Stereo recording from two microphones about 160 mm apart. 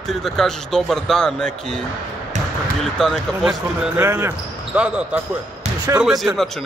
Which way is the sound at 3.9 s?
15° right (ahead or behind).